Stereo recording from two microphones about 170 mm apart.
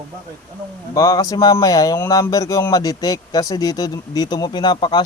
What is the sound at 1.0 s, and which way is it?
Speech, 20° left (ahead or behind).